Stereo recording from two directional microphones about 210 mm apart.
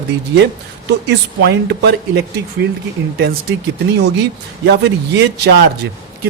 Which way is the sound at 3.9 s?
55° right (ahead or behind).